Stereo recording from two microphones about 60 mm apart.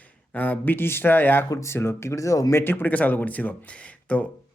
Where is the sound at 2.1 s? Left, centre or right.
Left.